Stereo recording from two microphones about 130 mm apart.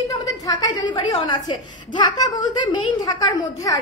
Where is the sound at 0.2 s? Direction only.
30° left (ahead or behind).